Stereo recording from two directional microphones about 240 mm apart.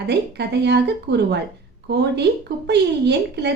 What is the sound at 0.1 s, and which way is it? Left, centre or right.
A woman's voice, right.